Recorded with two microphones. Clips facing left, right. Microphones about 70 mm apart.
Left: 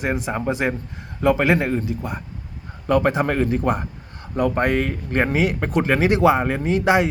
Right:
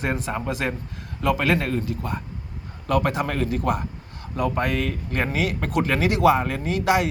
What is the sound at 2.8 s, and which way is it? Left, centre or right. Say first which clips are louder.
A man's voice: left 4 dB; left.